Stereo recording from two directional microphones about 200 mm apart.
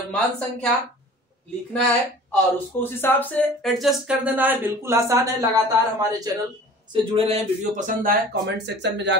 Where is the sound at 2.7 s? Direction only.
10° left (ahead or behind); by 6.3 s 15° right (ahead or behind).